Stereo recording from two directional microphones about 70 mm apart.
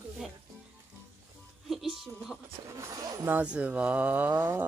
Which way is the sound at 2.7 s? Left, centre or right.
Right.